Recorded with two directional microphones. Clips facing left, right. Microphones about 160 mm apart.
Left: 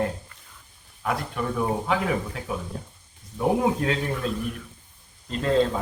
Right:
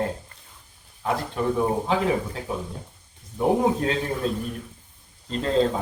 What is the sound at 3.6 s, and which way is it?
Speech, 30° right (ahead or behind).